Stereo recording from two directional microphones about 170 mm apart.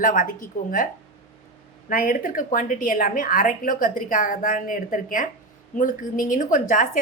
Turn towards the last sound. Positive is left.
turn(degrees=50)  # may be behind; listen again after turning